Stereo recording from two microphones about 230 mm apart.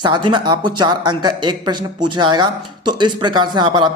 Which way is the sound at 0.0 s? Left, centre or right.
Centre.